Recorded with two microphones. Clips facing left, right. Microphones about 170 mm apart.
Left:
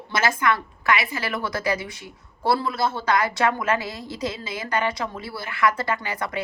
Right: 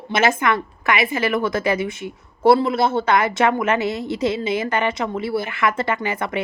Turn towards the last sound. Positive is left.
turn(degrees=-25)  # may be behind; listen again after turning